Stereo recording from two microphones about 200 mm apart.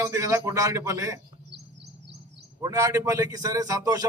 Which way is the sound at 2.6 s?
15° right (ahead or behind).